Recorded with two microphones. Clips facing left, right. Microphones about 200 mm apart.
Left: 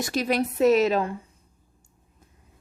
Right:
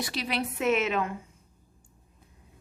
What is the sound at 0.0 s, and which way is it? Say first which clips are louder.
A woman's voice: left 7 dB; 45° left (ahead or behind).